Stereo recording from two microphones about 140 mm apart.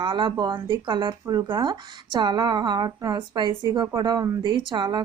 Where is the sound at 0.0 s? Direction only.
35° right (ahead or behind).